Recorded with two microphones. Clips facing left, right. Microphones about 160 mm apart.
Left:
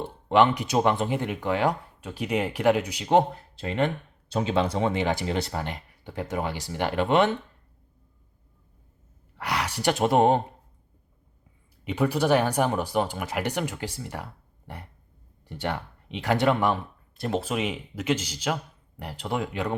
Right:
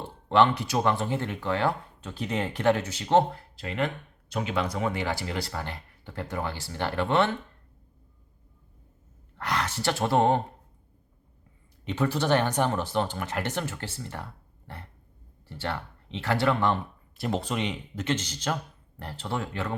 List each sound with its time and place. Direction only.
0.3 s speech: 15° left (ahead or behind)
3.5 s speech: 25° left (ahead or behind)
9.4 s speech: 10° left (ahead or behind)
11.9 s speech: 10° left (ahead or behind)
15.4 s speech: 15° left (ahead or behind)
17.2 s speech: centre (ahead or behind)